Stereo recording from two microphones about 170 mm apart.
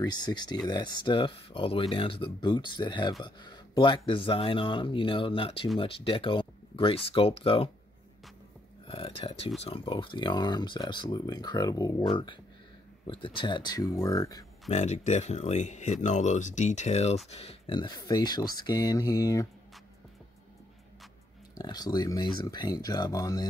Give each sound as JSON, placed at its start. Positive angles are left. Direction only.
{"t": 0.0, "sound": "speech", "side_deg": 25}
{"t": 8.8, "sound": "speech", "side_deg": 35}
{"t": 13.0, "sound": "speech", "side_deg": 30}
{"t": 14.7, "sound": "speech", "side_deg": 45}
{"t": 21.5, "sound": "speech", "side_deg": 25}